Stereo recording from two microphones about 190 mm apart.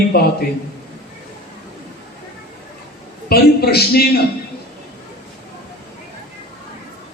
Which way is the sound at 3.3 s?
55° left (ahead or behind).